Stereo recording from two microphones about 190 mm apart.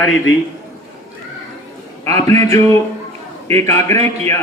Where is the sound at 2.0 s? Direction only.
15° left (ahead or behind).